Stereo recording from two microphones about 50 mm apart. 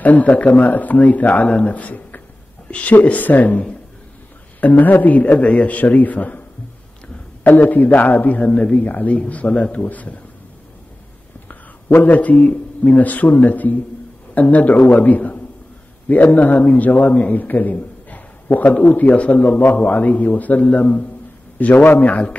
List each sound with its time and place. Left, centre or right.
0.0 s a man's voice: left
7.4 s a man's voice: left
8.4 s a man's voice: left
11.4 s a man's voice: left